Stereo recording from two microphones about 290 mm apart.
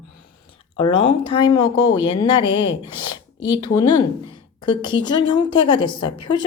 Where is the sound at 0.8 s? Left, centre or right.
Centre.